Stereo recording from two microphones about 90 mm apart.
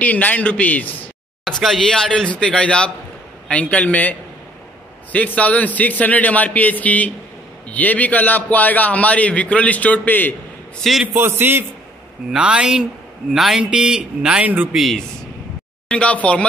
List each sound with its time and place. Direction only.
0.0 s a man's voice: 20° left (ahead or behind)
1.6 s a man's voice: 5° left (ahead or behind); by 10.3 s 20° left (ahead or behind)
10.8 s speech: centre (ahead or behind)
11.1 s a man's voice: 25° right (ahead or behind)
12.3 s a man's voice: 10° right (ahead or behind)
14.7 s speech: centre (ahead or behind)
15.9 s a man's voice: 15° left (ahead or behind)